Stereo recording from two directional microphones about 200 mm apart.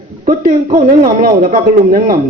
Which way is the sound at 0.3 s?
40° right (ahead or behind).